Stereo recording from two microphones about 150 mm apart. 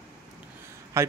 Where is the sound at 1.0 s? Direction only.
20° right (ahead or behind).